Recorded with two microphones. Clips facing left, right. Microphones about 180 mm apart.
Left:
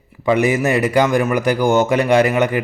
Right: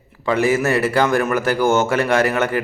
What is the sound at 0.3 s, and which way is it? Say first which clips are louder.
A man's voice: left 2 dB; 15° left (ahead or behind).